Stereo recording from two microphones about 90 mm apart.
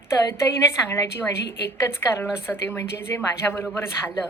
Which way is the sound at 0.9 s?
30° left (ahead or behind).